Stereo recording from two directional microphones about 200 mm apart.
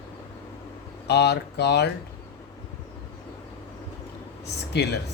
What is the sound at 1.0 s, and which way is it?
Speech, 55° left (ahead or behind).